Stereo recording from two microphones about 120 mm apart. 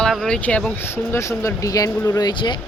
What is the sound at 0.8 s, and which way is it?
Speech, 20° left (ahead or behind).